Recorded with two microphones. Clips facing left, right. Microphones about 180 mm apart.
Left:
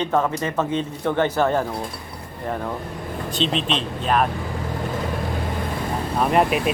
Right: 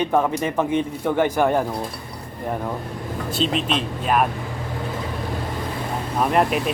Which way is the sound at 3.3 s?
5° right (ahead or behind).